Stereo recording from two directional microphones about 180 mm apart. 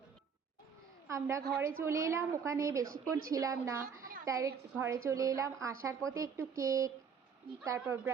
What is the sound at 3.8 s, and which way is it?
Speech, 50° right (ahead or behind).